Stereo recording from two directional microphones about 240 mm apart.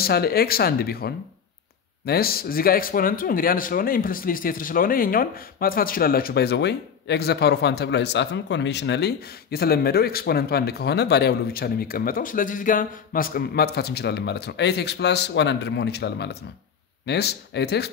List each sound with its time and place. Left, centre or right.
0.0 s speech: left